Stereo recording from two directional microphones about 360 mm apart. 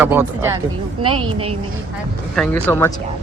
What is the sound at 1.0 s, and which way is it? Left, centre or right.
Speech, right.